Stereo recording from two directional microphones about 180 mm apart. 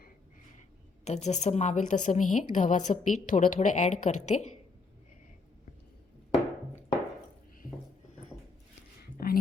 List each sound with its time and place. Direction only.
1.0 s a woman's voice: 40° left (ahead or behind)
9.2 s whispering: 55° left (ahead or behind)